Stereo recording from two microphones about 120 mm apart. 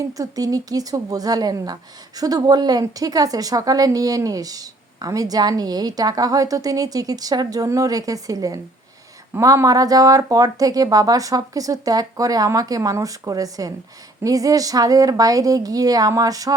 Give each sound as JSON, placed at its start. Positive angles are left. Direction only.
{"t": 0.0, "sound": "a woman's voice", "side_deg": -30}